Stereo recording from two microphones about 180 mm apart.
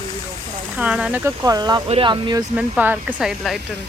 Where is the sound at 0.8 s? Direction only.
5° right (ahead or behind); by 2.4 s 25° right (ahead or behind).